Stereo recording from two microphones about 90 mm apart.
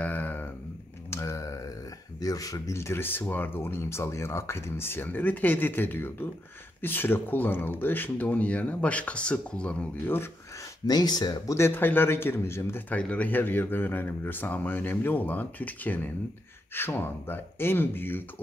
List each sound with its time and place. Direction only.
0.0 s a sound: 20° left (ahead or behind)
1.1 s typing: 35° left (ahead or behind)
2.1 s speech: 40° left (ahead or behind); by 9.8 s 10° left (ahead or behind)
10.0 s speech: 25° left (ahead or behind)
10.9 s speech: 50° left (ahead or behind)
11.5 s speech: 25° left (ahead or behind)
12.9 s speech: 15° left (ahead or behind)